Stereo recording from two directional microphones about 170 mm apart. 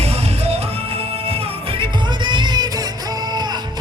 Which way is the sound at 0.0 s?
35° right (ahead or behind).